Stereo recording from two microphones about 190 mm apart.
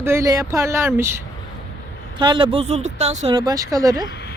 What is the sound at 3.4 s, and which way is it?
Speech, 20° right (ahead or behind).